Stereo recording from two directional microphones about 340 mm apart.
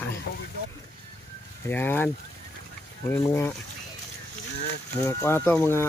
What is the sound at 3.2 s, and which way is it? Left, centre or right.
Speech, centre.